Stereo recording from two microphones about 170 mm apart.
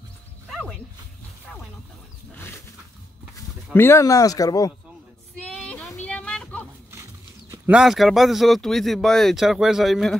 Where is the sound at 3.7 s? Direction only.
15° left (ahead or behind).